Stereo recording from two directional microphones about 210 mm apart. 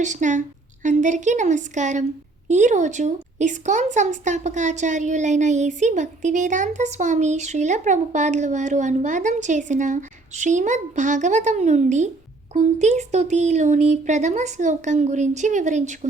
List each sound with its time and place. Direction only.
0.0 s speech: 35° right (ahead or behind)